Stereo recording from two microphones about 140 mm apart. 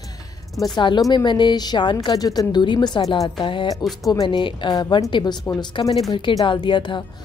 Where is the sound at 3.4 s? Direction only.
35° left (ahead or behind).